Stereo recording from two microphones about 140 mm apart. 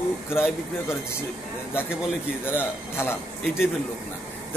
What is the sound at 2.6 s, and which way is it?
A man's voice, 15° left (ahead or behind).